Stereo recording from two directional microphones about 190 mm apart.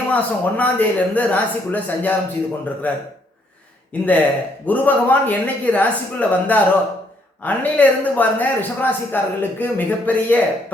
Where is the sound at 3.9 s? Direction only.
10° left (ahead or behind).